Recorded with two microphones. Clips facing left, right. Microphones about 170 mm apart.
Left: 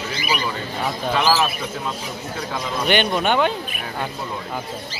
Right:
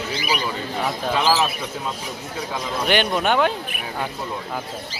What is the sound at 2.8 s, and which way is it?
Speech, centre (ahead or behind).